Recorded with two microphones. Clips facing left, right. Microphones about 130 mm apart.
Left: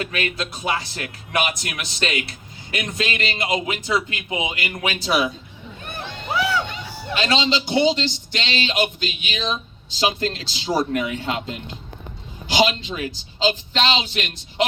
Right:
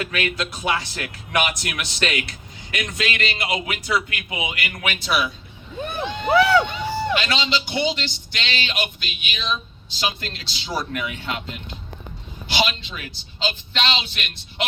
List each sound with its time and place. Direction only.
0.0 s a man's voice: 35° left (ahead or behind)
6.3 s crowd: 65° right (ahead or behind)
7.2 s a man's voice: 35° left (ahead or behind)